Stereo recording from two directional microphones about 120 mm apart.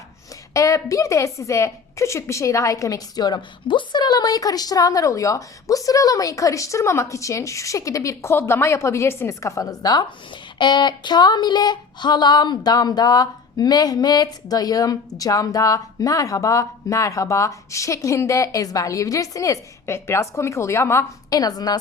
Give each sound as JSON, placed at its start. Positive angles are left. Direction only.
{"t": 0.5, "sound": "a woman's voice", "side_deg": 25}